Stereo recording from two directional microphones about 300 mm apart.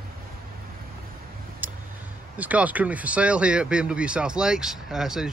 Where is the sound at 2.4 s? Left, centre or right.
Centre.